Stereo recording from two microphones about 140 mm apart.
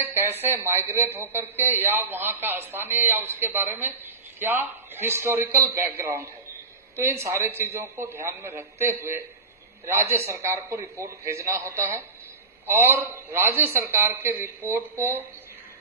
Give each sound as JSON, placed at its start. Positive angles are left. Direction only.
{"t": 0.0, "sound": "a man's voice", "side_deg": -15}